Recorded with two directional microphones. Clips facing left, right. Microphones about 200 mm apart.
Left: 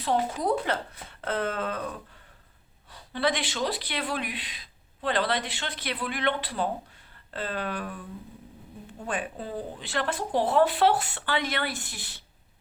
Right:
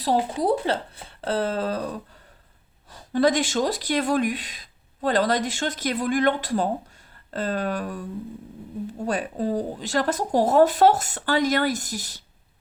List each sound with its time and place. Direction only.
0.0 s speech: 35° right (ahead or behind)
2.9 s speech: 45° right (ahead or behind)